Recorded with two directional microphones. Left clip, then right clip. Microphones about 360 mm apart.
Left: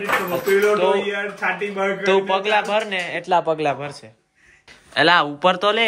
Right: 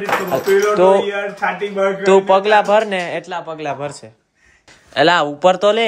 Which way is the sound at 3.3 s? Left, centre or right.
Centre.